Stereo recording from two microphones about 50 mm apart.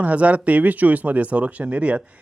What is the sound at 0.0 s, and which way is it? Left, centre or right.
Speech, right.